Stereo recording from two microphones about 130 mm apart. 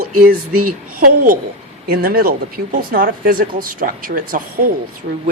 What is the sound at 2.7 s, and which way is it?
Speech, 90° right.